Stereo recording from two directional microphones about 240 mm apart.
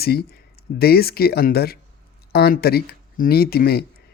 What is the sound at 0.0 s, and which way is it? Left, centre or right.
A man's voice, left.